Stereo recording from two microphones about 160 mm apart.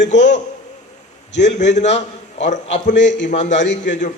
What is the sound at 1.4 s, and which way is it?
A man's voice, 45° left (ahead or behind).